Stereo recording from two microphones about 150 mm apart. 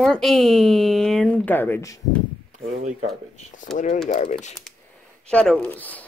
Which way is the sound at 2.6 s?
50° right (ahead or behind).